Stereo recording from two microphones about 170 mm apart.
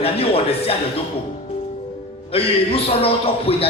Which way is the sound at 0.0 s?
35° left (ahead or behind).